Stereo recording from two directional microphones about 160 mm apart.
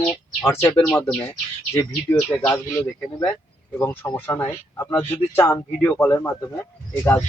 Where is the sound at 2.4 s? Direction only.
15° left (ahead or behind).